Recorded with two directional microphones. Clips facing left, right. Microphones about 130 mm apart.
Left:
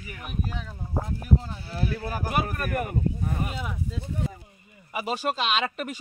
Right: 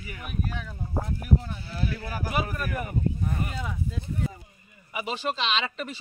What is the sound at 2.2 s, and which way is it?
Speech, 45° left (ahead or behind).